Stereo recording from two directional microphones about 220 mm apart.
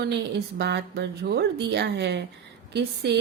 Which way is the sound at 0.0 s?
50° right (ahead or behind).